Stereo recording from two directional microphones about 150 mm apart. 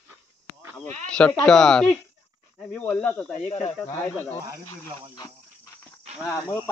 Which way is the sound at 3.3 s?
45° left (ahead or behind).